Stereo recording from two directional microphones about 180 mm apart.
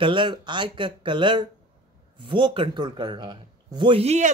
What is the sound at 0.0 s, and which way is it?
Speech, 25° right (ahead or behind).